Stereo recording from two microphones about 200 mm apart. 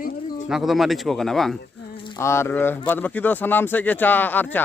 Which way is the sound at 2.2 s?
15° left (ahead or behind).